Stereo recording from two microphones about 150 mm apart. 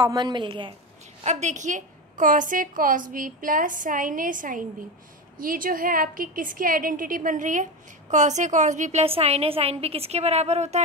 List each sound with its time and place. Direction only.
0.0 s a woman's voice: 25° right (ahead or behind)
1.2 s a woman's voice: 50° right (ahead or behind)